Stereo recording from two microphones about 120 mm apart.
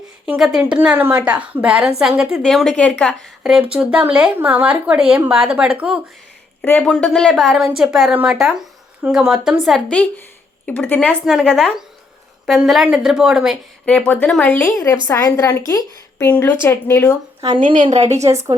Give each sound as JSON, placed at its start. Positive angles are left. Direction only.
{"t": 0.3, "sound": "a woman's voice", "side_deg": -5}
{"t": 3.4, "sound": "speech", "side_deg": -10}
{"t": 6.6, "sound": "a woman's voice", "side_deg": 10}
{"t": 9.6, "sound": "a woman's voice", "side_deg": 5}
{"t": 13.8, "sound": "a woman's voice", "side_deg": 10}
{"t": 17.6, "sound": "a woman's voice", "side_deg": -90}
{"t": 17.9, "sound": "a woman's voice", "side_deg": -65}